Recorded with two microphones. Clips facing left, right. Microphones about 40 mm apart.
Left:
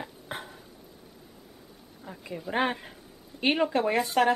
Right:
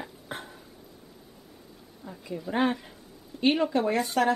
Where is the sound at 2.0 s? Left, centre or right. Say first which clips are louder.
Even; left.